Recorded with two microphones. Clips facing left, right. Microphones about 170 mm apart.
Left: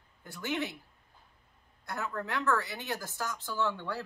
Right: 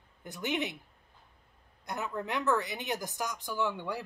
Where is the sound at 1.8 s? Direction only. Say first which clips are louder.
Right 1 dB; 20° right (ahead or behind).